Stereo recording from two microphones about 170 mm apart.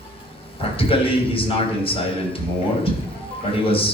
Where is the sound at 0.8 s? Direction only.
30° left (ahead or behind).